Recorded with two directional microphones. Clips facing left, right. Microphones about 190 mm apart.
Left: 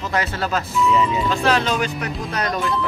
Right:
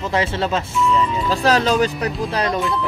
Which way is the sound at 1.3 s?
35° right (ahead or behind).